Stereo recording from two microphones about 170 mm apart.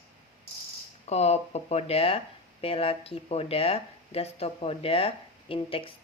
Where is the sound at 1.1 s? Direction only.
40° left (ahead or behind).